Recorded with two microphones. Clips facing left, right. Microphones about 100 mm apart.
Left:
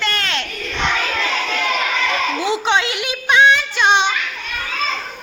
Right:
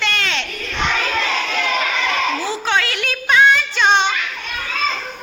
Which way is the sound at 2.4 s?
20° left (ahead or behind).